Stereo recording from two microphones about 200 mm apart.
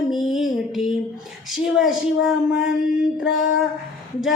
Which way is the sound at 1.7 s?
Centre (ahead or behind).